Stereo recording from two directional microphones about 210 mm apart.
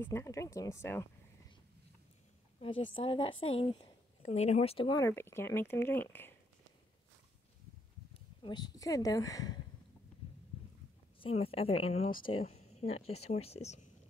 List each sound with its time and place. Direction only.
0.0 s speech: 10° left (ahead or behind)
2.6 s a woman's voice: 25° left (ahead or behind); by 6.3 s 10° left (ahead or behind)
8.1 s speech: 25° left (ahead or behind)
11.1 s a woman's voice: 25° left (ahead or behind)